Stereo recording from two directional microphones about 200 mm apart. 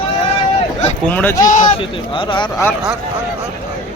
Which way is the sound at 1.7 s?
25° left (ahead or behind).